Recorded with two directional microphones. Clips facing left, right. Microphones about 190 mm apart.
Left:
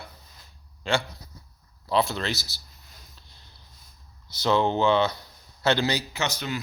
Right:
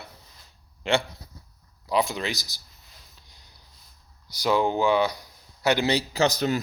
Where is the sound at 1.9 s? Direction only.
15° right (ahead or behind).